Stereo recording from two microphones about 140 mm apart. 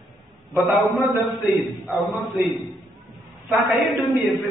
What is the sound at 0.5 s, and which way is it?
Speech, 20° left (ahead or behind).